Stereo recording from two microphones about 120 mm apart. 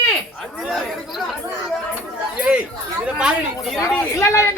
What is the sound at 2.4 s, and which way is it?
Speech, 10° right (ahead or behind).